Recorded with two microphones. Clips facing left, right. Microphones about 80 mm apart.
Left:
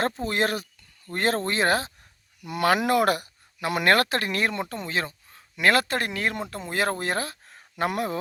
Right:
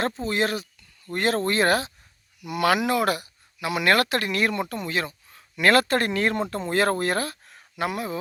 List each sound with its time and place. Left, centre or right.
0.0 s speech: left
1.1 s speech: left
1.5 s speech: left
5.9 s speech: centre
7.0 s a sound: left
7.9 s speech: left